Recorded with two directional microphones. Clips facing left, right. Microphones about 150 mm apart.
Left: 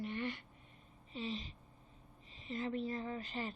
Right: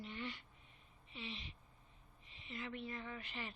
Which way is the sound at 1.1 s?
40° left (ahead or behind).